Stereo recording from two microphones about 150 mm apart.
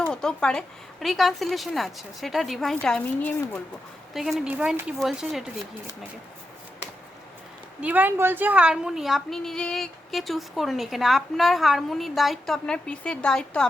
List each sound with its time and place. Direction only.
0.0 s a woman's voice: 5° left (ahead or behind)
4.1 s a woman's voice: centre (ahead or behind)
7.8 s a woman's voice: 10° right (ahead or behind); by 13.7 s 5° left (ahead or behind)